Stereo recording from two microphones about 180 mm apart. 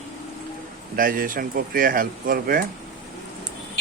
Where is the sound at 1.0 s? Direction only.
50° right (ahead or behind).